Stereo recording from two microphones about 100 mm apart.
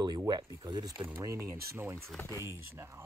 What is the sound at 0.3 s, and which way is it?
Speech, 50° right (ahead or behind).